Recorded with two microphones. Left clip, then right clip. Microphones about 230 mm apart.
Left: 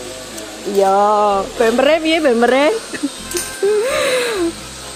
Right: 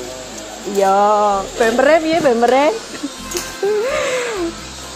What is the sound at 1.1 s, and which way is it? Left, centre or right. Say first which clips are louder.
Speech: left 1 dB; left.